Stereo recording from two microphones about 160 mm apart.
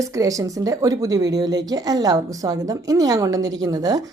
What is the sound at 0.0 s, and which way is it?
Speech, 20° right (ahead or behind).